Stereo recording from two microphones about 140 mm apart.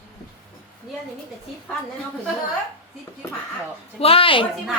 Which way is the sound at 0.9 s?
Centre (ahead or behind).